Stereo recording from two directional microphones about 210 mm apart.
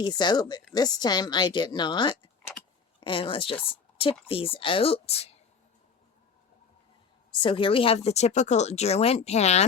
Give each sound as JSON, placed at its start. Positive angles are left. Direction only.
{"t": 0.0, "sound": "a woman's voice", "side_deg": 20}
{"t": 7.3, "sound": "a woman's voice", "side_deg": 25}